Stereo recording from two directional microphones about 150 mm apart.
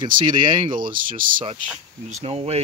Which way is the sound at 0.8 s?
65° right (ahead or behind).